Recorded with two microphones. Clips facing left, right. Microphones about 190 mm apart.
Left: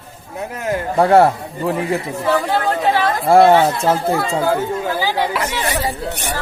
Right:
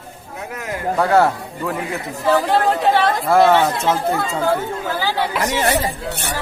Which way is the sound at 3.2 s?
30° left (ahead or behind).